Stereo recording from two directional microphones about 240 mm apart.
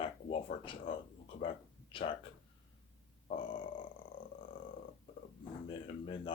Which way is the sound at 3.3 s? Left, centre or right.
Left.